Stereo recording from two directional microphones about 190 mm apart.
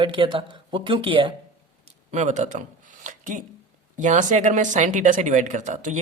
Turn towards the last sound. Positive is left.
turn(degrees=-40)  # may be behind; listen again after turning